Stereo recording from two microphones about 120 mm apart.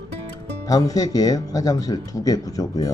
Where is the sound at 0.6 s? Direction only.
30° left (ahead or behind).